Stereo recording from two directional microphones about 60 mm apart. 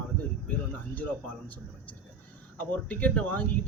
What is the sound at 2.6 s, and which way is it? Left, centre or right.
Speech, left.